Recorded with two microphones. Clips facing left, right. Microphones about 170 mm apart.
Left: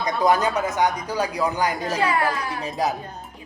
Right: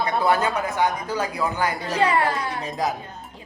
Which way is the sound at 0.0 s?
15° left (ahead or behind).